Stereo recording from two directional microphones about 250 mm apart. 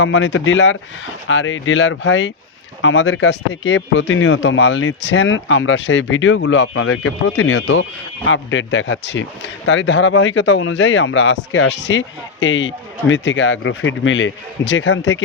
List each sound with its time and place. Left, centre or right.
0.0 s speech: left